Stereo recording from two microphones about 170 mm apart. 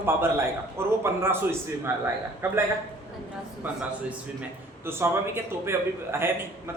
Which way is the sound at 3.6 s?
10° right (ahead or behind).